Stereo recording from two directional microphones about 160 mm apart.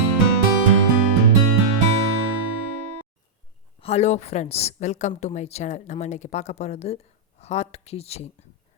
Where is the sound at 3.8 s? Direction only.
40° left (ahead or behind).